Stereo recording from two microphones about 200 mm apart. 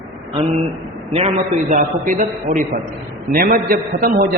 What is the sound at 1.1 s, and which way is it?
A man's voice, 30° right (ahead or behind).